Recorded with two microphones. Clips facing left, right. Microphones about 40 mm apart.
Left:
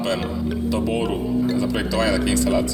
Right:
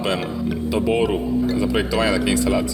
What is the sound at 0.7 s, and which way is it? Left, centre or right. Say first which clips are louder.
A man's voice: right 5 dB; right.